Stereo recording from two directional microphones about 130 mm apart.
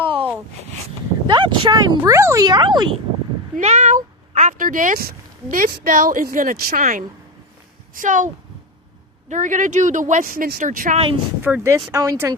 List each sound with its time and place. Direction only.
0.0 s a sound: 40° right (ahead or behind)
1.3 s speech: 35° right (ahead or behind)
3.6 s a woman's voice: 60° right (ahead or behind); by 7.0 s 90° right
7.9 s speech: 75° right (ahead or behind)
9.3 s speech: 75° right (ahead or behind); by 10.9 s 90° right
10.9 s speech: 45° right (ahead or behind)
11.4 s speech: 20° right (ahead or behind)